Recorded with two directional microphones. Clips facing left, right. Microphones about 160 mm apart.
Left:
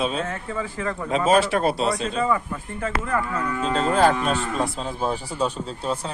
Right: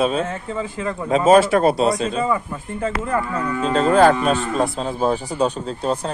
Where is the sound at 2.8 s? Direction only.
25° right (ahead or behind).